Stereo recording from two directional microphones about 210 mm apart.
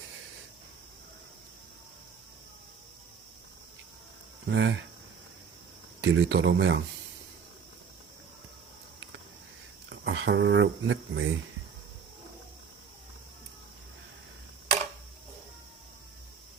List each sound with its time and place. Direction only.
4.4 s speech: 60° right (ahead or behind)
6.0 s speech: 65° right (ahead or behind)
9.9 s speech: 60° right (ahead or behind)